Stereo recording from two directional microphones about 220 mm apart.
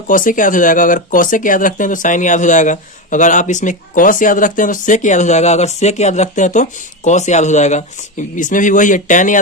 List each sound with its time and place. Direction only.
0.1 s speech: 35° left (ahead or behind)